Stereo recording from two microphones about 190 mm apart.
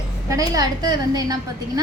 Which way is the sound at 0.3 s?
20° right (ahead or behind).